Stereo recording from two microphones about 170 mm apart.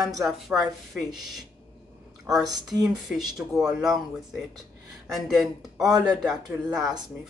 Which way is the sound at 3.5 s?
Centre (ahead or behind).